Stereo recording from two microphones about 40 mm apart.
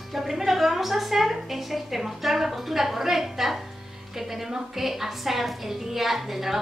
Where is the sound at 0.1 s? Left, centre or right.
Centre.